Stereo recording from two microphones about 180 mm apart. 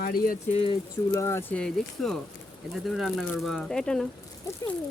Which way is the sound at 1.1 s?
15° left (ahead or behind).